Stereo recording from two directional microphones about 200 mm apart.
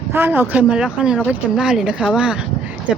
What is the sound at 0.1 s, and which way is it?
A woman's voice, 10° right (ahead or behind).